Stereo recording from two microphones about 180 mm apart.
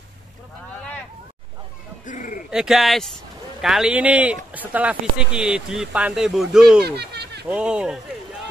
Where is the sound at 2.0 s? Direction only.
45° left (ahead or behind).